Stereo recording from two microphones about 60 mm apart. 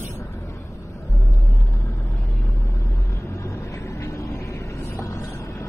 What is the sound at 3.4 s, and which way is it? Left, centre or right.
Vehicle, left.